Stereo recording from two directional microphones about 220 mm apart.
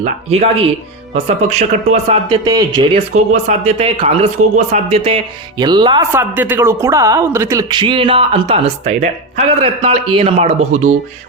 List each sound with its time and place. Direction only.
0.0 s a man's voice: 30° right (ahead or behind)
2.4 s speech: 15° right (ahead or behind)
3.3 s a man's voice: 30° right (ahead or behind)